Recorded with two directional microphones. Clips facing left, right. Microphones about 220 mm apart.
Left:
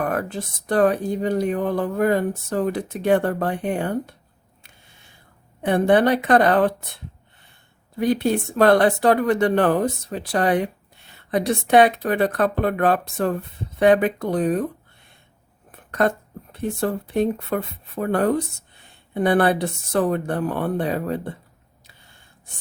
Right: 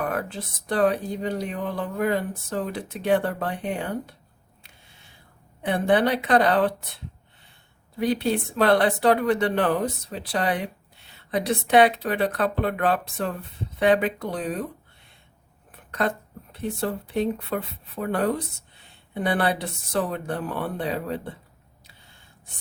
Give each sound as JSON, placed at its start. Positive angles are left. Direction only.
{"t": 0.0, "sound": "speech", "side_deg": 45}
{"t": 5.6, "sound": "speech", "side_deg": 50}
{"t": 7.9, "sound": "speech", "side_deg": 50}
{"t": 15.7, "sound": "speech", "side_deg": 50}